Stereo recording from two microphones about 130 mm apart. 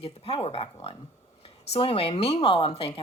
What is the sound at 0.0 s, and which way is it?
Speech, 45° left (ahead or behind).